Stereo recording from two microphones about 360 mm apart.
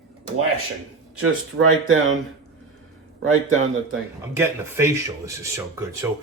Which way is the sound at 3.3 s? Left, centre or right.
Right.